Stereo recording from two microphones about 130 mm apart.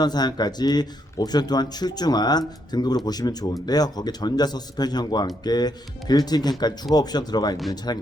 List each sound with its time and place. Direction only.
0.0 s speech: 30° left (ahead or behind)